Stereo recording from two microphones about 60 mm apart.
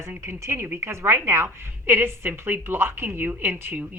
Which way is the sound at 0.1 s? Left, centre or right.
Right.